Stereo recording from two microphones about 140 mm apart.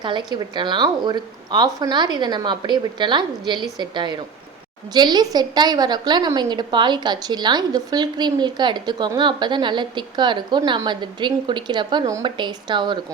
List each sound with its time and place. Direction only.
0.0 s a woman's voice: 35° right (ahead or behind)